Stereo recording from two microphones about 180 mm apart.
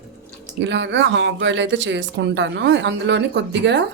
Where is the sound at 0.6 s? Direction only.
80° right.